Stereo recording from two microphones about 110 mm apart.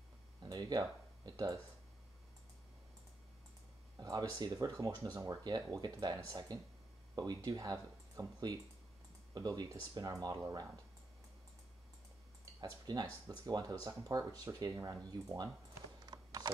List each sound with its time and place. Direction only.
0.4 s speech: 35° right (ahead or behind)
4.0 s speech: 35° right (ahead or behind)
12.5 s speech: 35° right (ahead or behind)
16.1 s a sound: 40° right (ahead or behind)